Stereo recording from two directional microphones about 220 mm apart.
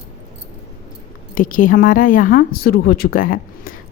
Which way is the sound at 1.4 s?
40° left (ahead or behind).